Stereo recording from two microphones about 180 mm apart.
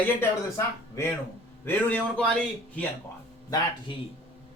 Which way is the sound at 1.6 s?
10° left (ahead or behind).